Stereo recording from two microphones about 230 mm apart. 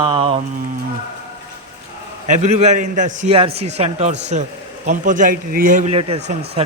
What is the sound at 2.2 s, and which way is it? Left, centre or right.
A man's voice, right.